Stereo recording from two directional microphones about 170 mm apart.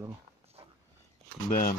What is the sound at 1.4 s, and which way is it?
Speech, 50° left (ahead or behind).